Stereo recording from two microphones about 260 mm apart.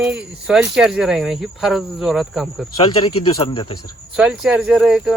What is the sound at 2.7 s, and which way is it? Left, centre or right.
Speech, centre.